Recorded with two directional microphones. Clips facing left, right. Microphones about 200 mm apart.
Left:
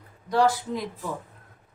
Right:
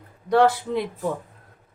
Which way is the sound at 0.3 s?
60° right (ahead or behind).